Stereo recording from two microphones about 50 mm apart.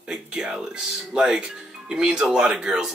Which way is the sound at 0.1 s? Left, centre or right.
Centre.